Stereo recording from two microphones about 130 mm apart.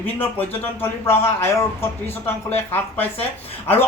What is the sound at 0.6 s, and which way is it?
Speech, 20° left (ahead or behind).